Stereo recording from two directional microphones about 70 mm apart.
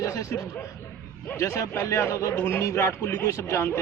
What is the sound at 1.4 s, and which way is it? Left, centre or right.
A man's voice, left.